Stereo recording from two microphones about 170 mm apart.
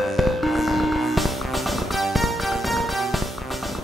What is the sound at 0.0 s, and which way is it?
Music, centre (ahead or behind).